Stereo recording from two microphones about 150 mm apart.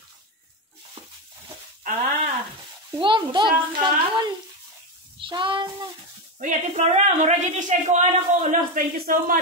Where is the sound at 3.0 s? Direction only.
30° right (ahead or behind).